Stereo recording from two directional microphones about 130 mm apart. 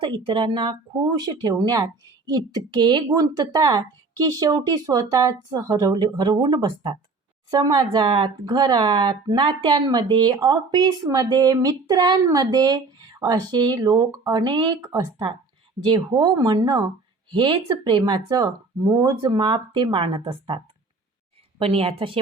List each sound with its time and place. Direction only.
0.3 s speech: 40° right (ahead or behind)
21.6 s a woman's voice: 45° right (ahead or behind)